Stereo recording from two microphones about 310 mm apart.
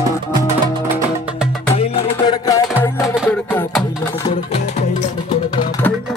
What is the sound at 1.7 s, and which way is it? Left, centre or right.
Music, centre.